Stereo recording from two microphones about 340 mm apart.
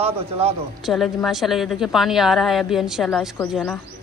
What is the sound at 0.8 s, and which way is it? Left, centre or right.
A woman's voice, centre.